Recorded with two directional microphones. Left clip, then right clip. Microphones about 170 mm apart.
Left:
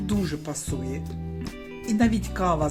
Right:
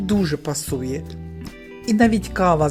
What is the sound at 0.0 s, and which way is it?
Speech, 40° right (ahead or behind).